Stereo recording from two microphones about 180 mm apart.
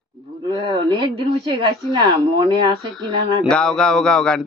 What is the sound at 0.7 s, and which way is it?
Speech, 20° right (ahead or behind).